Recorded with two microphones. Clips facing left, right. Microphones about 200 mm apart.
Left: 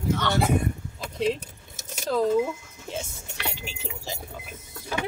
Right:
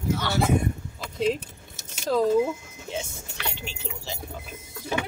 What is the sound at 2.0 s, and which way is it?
Speech, 5° right (ahead or behind).